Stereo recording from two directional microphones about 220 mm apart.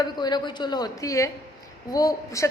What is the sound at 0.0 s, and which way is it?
A woman's voice, 20° left (ahead or behind).